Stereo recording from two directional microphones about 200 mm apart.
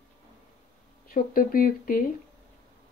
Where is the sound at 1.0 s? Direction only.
45° left (ahead or behind).